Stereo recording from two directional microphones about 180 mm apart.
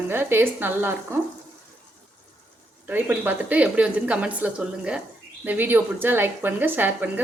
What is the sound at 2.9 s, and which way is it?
Speech, 10° right (ahead or behind).